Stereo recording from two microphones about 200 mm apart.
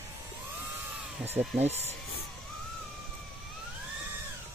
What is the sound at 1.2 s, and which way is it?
Speech, 5° right (ahead or behind).